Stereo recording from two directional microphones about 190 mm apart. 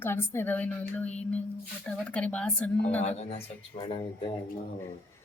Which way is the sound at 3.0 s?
35° left (ahead or behind).